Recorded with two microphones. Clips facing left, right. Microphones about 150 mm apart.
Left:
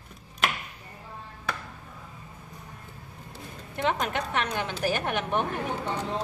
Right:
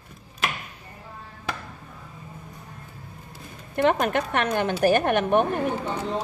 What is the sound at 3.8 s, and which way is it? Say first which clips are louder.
A woman's voice: right 6 dB; 55° right (ahead or behind).